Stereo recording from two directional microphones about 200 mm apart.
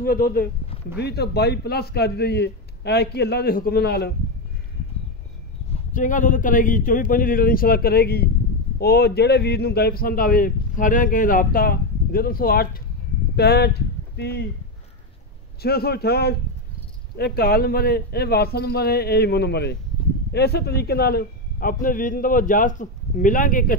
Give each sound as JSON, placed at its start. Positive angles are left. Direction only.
{"t": 0.0, "sound": "a man's voice", "side_deg": 45}
{"t": 5.7, "sound": "a man's voice", "side_deg": 40}
{"t": 15.6, "sound": "a man's voice", "side_deg": 50}